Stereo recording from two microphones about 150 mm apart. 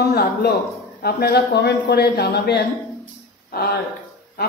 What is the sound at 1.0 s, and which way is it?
Speech, 90° left.